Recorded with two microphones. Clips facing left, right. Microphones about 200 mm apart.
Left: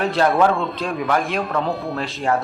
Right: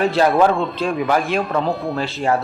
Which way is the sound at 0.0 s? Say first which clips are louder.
Right 2 dB; centre (ahead or behind).